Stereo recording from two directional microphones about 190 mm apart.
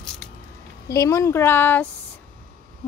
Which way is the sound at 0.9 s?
15° left (ahead or behind).